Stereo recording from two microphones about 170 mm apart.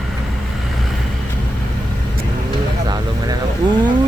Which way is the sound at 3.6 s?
25° right (ahead or behind).